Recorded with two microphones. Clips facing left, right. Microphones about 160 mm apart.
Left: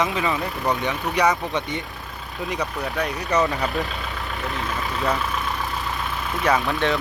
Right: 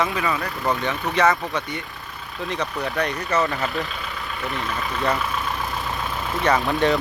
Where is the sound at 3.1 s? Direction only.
20° left (ahead or behind).